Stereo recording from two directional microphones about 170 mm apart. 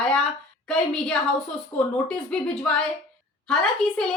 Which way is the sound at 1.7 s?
40° left (ahead or behind).